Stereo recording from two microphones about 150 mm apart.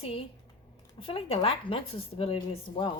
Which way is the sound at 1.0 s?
35° left (ahead or behind).